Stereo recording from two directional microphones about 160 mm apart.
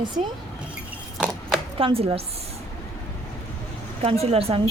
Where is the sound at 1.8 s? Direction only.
35° right (ahead or behind).